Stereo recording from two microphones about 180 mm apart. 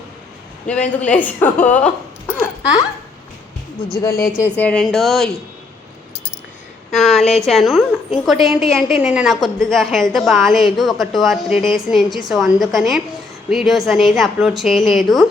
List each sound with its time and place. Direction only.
0.7 s a man's voice: 5° left (ahead or behind)
3.9 s a man's voice: 15° left (ahead or behind)
4.3 s a woman's voice: 5° right (ahead or behind)
4.5 s a woman's voice: 5° left (ahead or behind)
6.9 s a woman's voice: centre (ahead or behind)